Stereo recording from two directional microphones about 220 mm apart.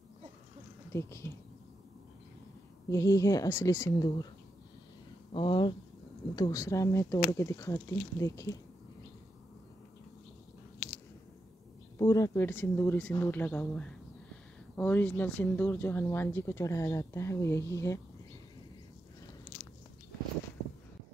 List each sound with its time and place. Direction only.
0.9 s speech: 10° left (ahead or behind)
2.9 s speech: 15° left (ahead or behind)
5.3 s speech: 20° left (ahead or behind)
12.0 s speech: 15° left (ahead or behind)